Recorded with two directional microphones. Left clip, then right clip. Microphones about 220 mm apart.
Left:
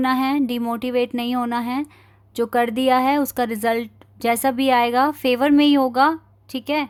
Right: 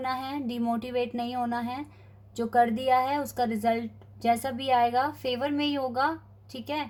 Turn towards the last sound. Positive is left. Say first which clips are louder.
# left 10 dB
turn(degrees=40)  # may be behind; listen again after turning